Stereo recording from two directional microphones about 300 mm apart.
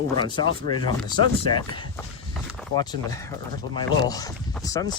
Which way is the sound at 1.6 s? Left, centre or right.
Centre.